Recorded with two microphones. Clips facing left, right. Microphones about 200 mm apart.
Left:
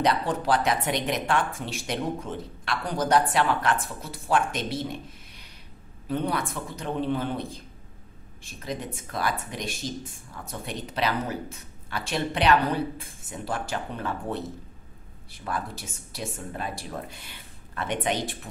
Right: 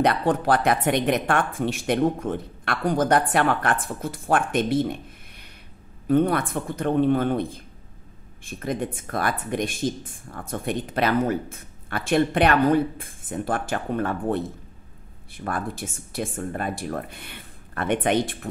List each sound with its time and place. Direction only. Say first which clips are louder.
0.0 s speech: right 4 dB; 55° right (ahead or behind)
6.0 s speech: right 8 dB; 55° right (ahead or behind)